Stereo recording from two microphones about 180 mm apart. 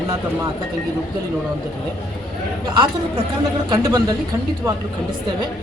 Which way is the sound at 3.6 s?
20° right (ahead or behind).